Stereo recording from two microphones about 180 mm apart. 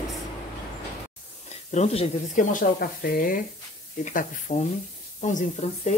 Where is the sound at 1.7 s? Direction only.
40° left (ahead or behind).